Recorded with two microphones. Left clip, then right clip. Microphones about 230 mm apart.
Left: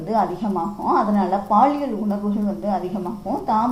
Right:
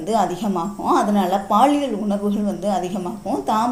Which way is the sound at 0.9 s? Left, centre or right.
Right.